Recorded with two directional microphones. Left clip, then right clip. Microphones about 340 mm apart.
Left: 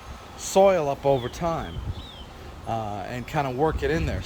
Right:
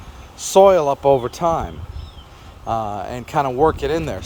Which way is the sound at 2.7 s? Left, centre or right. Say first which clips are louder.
Right 7 dB; centre.